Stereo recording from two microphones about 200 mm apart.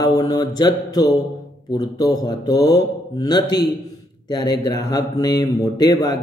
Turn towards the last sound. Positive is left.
turn(degrees=20)  # may be behind; listen again after turning